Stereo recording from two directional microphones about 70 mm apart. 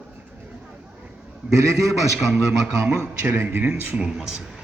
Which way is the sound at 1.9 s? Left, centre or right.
Centre.